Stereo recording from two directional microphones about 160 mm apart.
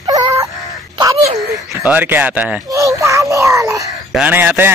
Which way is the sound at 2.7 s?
20° right (ahead or behind).